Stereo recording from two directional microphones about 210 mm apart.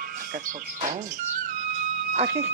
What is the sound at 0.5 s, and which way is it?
Speech, 35° right (ahead or behind).